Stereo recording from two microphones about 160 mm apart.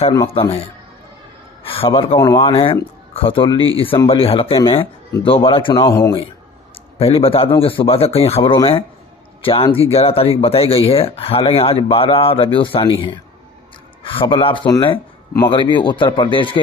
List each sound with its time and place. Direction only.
0.3 s speech: 35° left (ahead or behind)
1.6 s speech: 35° left (ahead or behind)
7.0 s a man's voice: 35° left (ahead or behind)